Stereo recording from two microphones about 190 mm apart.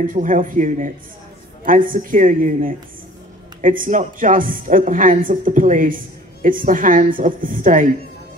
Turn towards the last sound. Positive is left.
turn(degrees=-45)  # may be behind; listen again after turning